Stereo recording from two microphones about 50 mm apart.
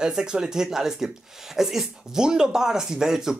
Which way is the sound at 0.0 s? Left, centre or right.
Centre.